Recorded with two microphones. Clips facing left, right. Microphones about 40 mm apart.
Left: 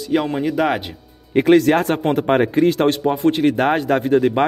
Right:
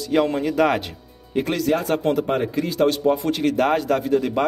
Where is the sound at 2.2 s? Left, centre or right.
Left.